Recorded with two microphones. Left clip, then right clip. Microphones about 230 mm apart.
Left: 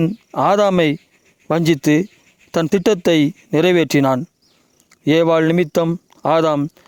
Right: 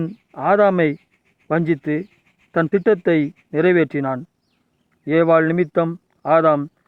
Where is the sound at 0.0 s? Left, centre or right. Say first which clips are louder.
Left 6 dB; left.